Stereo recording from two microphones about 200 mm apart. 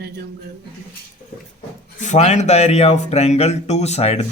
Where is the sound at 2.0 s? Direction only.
35° left (ahead or behind).